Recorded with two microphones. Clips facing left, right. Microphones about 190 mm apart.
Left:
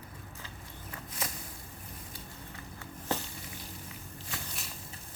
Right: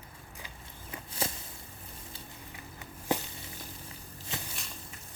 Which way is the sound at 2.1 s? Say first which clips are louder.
Left 1 dB; 15° right (ahead or behind).